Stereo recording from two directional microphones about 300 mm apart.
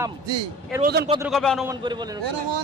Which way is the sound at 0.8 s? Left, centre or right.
Right.